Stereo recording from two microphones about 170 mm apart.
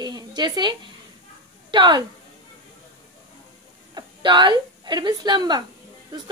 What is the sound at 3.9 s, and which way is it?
A woman's voice, 25° right (ahead or behind).